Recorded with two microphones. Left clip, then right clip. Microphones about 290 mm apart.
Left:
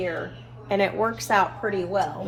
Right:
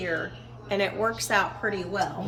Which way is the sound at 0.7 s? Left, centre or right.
Centre.